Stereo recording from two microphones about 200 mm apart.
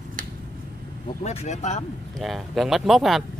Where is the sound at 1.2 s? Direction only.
35° left (ahead or behind).